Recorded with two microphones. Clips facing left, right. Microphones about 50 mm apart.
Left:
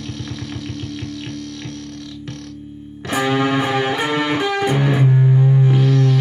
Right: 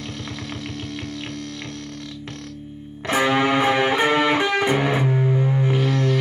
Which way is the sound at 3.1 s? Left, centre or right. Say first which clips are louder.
Left 1 dB; centre.